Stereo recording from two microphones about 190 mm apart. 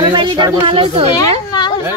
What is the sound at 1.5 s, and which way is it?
Speech, 20° left (ahead or behind).